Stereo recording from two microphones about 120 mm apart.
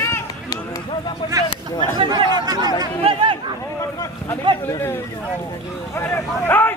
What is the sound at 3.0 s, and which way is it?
Chatter, 50° right (ahead or behind).